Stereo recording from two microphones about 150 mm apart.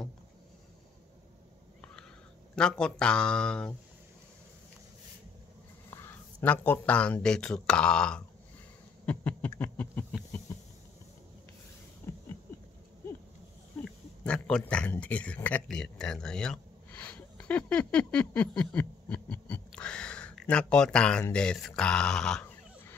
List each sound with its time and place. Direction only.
2.5 s speech: 5° left (ahead or behind)
5.9 s speech: 15° left (ahead or behind)
9.0 s a sound: 10° left (ahead or behind)
12.1 s rodents: 20° left (ahead or behind)
13.8 s speech: 5° left (ahead or behind)